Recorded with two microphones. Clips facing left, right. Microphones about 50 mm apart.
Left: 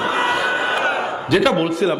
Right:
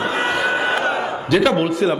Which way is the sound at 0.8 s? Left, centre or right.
Left.